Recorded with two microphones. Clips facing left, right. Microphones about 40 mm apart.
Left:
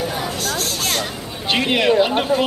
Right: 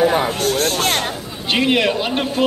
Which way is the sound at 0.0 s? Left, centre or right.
Right.